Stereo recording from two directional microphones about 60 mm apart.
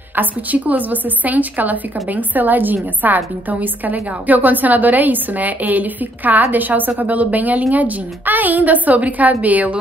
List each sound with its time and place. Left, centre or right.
0.1 s a woman's voice: right